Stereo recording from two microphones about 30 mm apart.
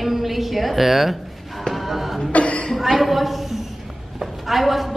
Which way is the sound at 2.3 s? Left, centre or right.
Left.